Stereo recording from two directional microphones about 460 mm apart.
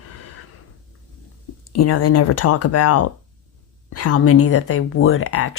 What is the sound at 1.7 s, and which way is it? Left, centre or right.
Speech, left.